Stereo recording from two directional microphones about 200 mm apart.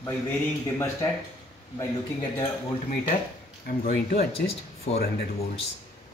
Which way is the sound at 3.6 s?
45° left (ahead or behind).